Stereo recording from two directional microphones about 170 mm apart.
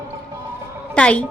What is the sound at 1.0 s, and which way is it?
Speech, 5° left (ahead or behind).